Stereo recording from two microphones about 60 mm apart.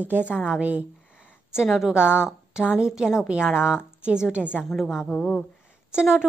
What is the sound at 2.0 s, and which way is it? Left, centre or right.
Speech, left.